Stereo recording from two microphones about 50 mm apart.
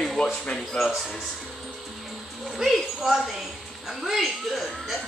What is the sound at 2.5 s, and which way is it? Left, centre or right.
A woman's voice, centre.